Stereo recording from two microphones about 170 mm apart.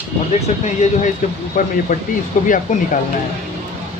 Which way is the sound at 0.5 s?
45° left (ahead or behind).